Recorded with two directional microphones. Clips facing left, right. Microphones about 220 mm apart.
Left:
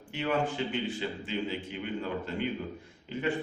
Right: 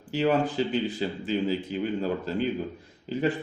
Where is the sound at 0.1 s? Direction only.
35° right (ahead or behind).